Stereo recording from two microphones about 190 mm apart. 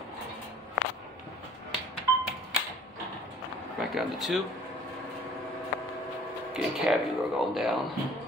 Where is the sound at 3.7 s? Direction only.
Centre (ahead or behind).